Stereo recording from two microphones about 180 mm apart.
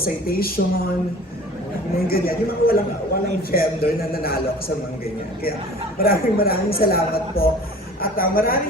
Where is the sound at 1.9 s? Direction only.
55° left (ahead or behind).